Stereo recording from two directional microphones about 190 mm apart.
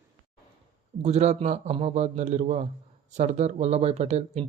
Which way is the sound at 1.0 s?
35° right (ahead or behind).